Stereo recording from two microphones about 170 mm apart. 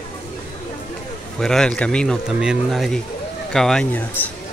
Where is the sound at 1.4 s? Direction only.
5° left (ahead or behind).